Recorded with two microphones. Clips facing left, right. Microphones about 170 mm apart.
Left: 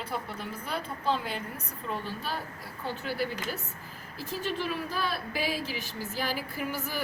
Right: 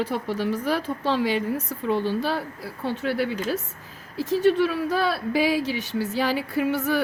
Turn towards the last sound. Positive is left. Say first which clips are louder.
# right 11 dB
turn(degrees=-85)